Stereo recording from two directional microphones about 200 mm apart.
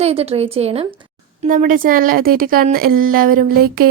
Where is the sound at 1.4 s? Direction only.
40° right (ahead or behind).